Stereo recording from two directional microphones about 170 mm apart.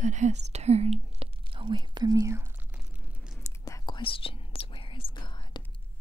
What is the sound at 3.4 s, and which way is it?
Whispering, 20° left (ahead or behind).